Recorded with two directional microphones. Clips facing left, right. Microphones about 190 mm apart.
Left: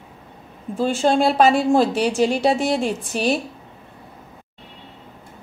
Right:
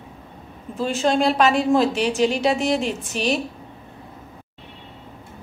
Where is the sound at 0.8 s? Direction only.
35° left (ahead or behind).